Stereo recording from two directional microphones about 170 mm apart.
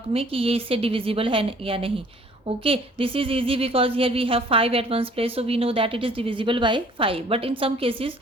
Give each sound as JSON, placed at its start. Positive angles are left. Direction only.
{"t": 0.1, "sound": "speech", "side_deg": -35}